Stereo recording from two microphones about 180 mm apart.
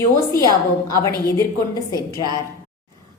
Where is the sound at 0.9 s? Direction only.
15° left (ahead or behind).